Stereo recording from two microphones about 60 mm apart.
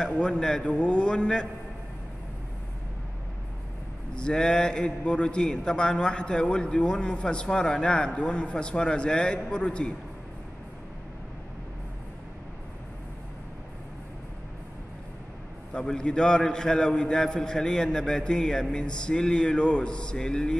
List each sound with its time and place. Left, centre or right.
0.0 s a man's voice: centre
4.1 s a man's voice: centre
15.7 s a man's voice: centre